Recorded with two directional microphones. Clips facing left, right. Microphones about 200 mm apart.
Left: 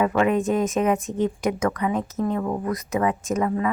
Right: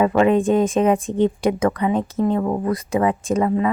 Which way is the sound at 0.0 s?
30° right (ahead or behind).